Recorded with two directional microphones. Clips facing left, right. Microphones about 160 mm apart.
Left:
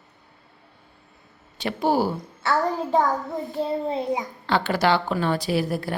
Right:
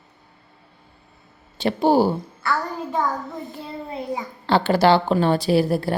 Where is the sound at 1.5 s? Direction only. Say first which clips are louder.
Right 5 dB; 30° right (ahead or behind).